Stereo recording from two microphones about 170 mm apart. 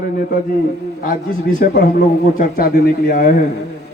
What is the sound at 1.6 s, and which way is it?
A man's voice, 65° left (ahead or behind).